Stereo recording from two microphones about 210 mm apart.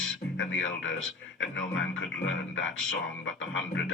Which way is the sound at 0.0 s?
65° left (ahead or behind).